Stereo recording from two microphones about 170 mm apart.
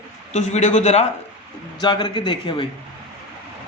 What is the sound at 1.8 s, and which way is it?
Speech, 25° left (ahead or behind).